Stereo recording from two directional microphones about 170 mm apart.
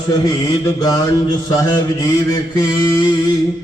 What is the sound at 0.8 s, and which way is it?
Mantra, 20° left (ahead or behind).